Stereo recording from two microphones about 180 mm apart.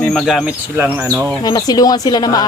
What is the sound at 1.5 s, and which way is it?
Speech, 20° left (ahead or behind).